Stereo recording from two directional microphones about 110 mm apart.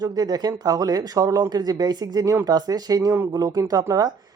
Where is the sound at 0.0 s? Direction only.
35° right (ahead or behind).